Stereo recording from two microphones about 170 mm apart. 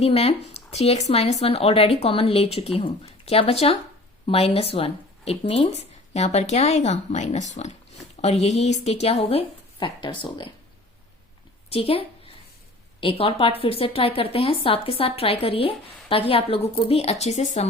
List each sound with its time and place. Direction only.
0.0 s speech: 35° left (ahead or behind)
11.7 s speech: 35° left (ahead or behind)